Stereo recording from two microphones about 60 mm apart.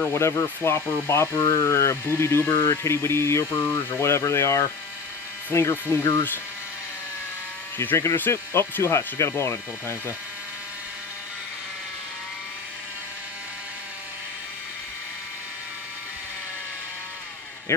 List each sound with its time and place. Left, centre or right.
0.1 s speech: left
7.7 s speech: left
8.3 s speech: left
17.7 s speech: left